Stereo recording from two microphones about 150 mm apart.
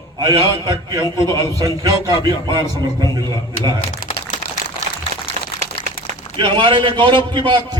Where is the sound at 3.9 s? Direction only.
55° left (ahead or behind).